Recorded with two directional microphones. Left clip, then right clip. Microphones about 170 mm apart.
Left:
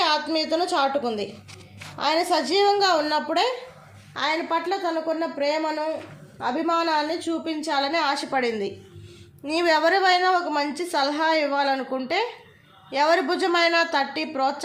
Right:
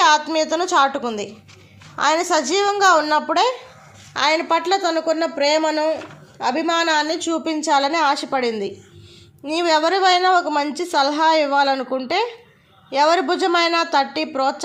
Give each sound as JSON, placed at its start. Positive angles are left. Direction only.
{"t": 0.0, "sound": "a woman's voice", "side_deg": -50}
{"t": 4.1, "sound": "a woman's voice", "side_deg": -60}